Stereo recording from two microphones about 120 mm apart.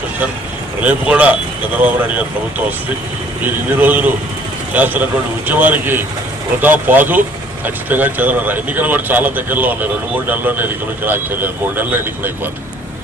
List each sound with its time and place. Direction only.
0.8 s speech: 10° right (ahead or behind)
3.7 s speech: 15° right (ahead or behind)